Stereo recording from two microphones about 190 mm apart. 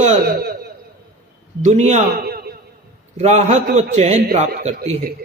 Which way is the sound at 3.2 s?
35° right (ahead or behind).